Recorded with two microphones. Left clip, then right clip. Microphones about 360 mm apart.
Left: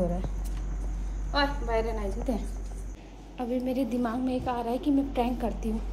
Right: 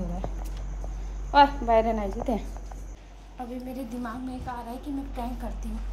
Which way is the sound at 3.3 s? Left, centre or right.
Centre.